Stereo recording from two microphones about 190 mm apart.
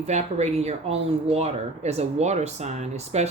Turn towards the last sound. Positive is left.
turn(degrees=-35)  # may be behind; listen again after turning